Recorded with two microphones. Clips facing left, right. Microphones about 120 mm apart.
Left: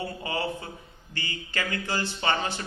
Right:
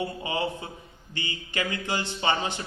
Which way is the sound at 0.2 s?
20° right (ahead or behind).